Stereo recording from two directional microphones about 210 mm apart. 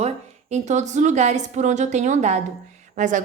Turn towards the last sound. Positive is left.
turn(degrees=-35)  # may be behind; listen again after turning